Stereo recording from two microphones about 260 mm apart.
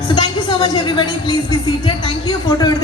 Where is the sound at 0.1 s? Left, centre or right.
Centre.